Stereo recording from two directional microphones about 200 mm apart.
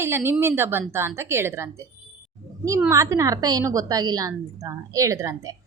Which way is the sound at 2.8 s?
15° right (ahead or behind).